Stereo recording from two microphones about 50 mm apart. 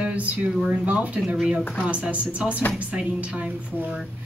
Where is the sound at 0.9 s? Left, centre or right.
Right.